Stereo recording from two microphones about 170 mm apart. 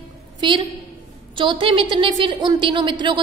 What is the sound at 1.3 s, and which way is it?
A woman's voice, 30° right (ahead or behind).